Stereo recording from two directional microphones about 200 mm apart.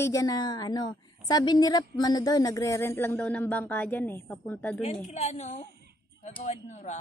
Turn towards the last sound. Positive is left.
turn(degrees=35)  # may be behind; listen again after turning